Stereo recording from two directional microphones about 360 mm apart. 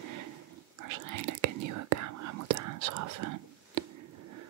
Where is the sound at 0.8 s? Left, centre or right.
Right.